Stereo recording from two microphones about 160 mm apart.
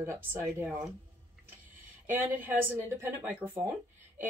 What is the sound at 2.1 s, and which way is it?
Speech, 10° right (ahead or behind).